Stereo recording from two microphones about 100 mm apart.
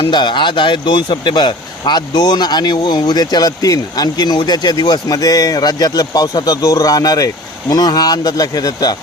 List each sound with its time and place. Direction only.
0.0 s speech: 50° left (ahead or behind)